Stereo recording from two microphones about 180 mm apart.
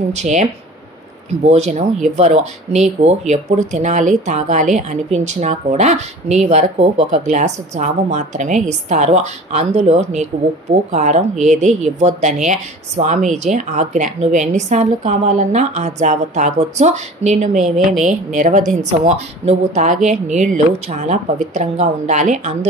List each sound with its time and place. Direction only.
0.1 s a woman's voice: 40° right (ahead or behind)